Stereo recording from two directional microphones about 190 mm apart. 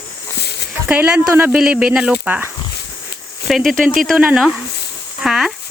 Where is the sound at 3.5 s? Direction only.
Centre (ahead or behind).